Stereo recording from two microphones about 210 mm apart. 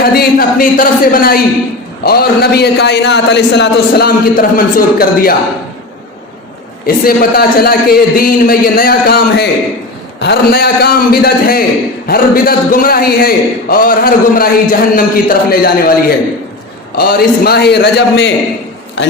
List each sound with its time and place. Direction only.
0.0 s a man's voice: 45° left (ahead or behind)
6.8 s a man's voice: 45° left (ahead or behind)